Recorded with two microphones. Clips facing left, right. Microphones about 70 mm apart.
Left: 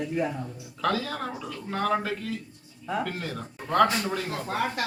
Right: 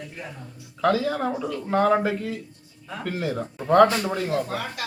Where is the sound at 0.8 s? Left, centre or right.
Centre.